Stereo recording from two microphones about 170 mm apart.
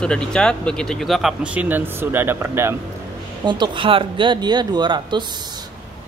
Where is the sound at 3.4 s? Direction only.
25° right (ahead or behind).